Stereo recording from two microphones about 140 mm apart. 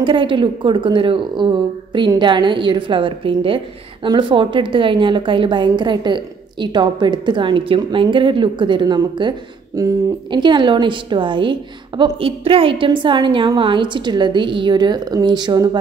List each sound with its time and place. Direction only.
0.0 s a woman's voice: 35° right (ahead or behind)